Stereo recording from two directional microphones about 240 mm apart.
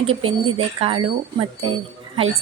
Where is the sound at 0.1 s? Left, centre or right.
Right.